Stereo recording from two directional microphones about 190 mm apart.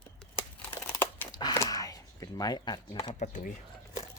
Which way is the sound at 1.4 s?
20° left (ahead or behind).